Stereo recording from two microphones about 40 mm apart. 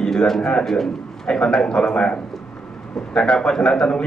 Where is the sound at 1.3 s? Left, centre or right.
Centre.